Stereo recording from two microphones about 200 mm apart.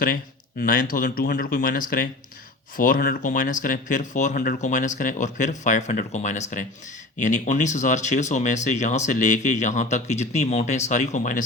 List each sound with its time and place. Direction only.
0.6 s speech: 45° left (ahead or behind)